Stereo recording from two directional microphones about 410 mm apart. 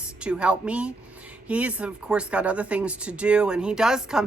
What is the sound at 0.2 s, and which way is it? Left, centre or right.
Speech, centre.